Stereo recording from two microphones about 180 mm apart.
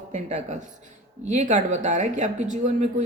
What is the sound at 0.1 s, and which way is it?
Speech, 40° right (ahead or behind).